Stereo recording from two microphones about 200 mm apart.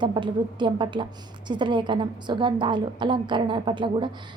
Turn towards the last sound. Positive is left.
turn(degrees=-25)  # may be behind; listen again after turning